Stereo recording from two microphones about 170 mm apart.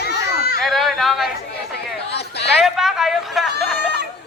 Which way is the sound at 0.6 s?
Centre (ahead or behind).